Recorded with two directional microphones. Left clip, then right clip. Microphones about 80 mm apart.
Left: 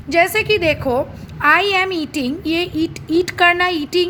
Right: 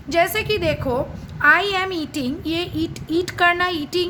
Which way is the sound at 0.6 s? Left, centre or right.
Left.